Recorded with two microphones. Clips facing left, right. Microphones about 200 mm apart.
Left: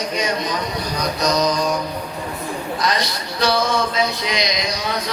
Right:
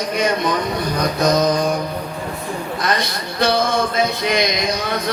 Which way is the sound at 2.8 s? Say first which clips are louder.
Right 1 dB; 55° right (ahead or behind).